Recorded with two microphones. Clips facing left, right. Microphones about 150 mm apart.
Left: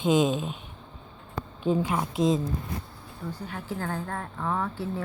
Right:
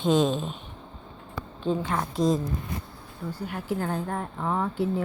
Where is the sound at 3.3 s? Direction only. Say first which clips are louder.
Right 6 dB; 10° right (ahead or behind).